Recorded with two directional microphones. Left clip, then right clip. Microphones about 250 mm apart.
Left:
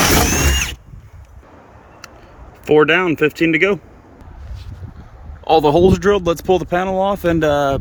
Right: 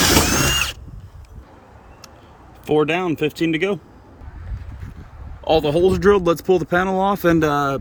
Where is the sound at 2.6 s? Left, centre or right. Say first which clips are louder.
Left 6 dB; centre.